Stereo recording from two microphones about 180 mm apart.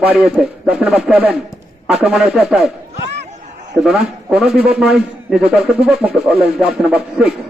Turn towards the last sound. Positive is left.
turn(degrees=-5)  # may be behind; listen again after turning